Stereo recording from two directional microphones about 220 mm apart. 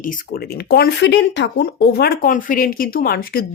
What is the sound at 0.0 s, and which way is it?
Speech, 40° left (ahead or behind).